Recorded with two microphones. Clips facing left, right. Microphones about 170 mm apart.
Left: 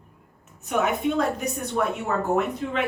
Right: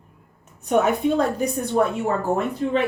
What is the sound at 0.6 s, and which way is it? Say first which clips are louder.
A woman's voice: right 5 dB; 35° right (ahead or behind).